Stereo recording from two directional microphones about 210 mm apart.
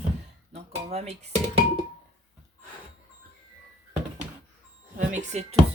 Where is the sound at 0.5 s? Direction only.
30° right (ahead or behind).